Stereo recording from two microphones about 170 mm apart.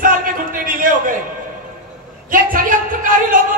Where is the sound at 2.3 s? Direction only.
55° right (ahead or behind).